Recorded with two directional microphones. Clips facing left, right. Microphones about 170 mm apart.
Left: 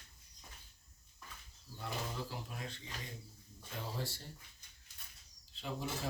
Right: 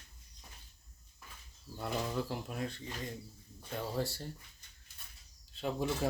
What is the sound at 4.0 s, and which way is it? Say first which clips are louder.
Speech: right 8 dB; 50° right (ahead or behind).